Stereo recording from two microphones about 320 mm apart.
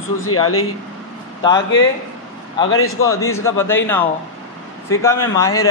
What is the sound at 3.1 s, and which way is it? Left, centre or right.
A man's voice, centre.